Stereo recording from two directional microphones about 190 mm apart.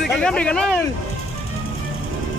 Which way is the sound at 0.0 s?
5° left (ahead or behind).